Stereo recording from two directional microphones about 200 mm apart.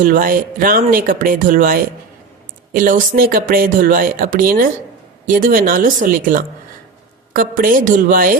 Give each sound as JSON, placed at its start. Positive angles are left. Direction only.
{"t": 0.0, "sound": "speech", "side_deg": -45}